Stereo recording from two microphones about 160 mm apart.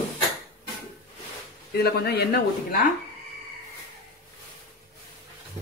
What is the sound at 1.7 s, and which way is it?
Speech, 80° left.